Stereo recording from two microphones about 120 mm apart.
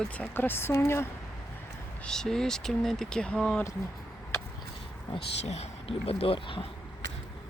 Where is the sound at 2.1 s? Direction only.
5° left (ahead or behind).